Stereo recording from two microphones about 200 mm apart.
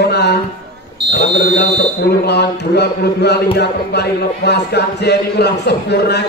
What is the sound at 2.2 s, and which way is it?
Speech, 55° left (ahead or behind).